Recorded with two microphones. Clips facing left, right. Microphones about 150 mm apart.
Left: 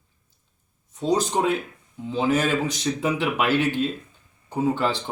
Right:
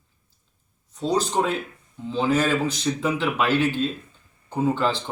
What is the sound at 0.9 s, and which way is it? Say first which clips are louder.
Speech: even; 15° left (ahead or behind).